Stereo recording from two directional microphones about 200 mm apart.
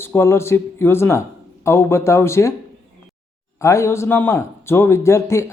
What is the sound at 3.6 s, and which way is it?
A man's voice, 15° left (ahead or behind).